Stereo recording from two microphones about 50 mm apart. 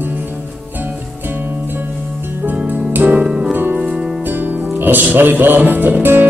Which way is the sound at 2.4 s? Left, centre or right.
Right.